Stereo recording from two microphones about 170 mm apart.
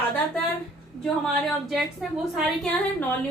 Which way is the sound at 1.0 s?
Centre (ahead or behind).